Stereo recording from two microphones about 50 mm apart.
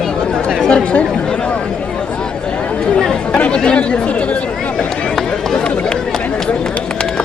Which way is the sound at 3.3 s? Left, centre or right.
Left.